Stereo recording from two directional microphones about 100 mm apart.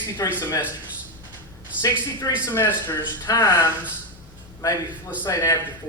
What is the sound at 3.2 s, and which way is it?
Speech, 45° left (ahead or behind).